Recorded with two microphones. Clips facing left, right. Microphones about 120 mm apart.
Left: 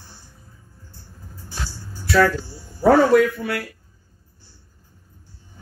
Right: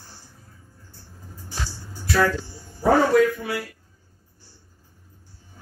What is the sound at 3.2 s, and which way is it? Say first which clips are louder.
Speech: even; 60° left (ahead or behind).